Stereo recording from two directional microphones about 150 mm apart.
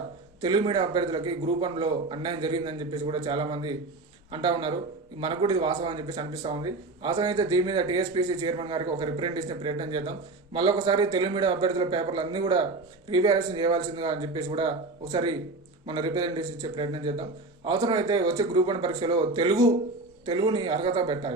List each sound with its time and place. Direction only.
0.4 s speech: 30° right (ahead or behind)